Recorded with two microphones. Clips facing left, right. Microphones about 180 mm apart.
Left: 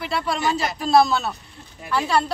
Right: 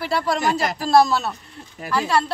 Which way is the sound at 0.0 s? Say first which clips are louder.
Right 2 dB; centre (ahead or behind).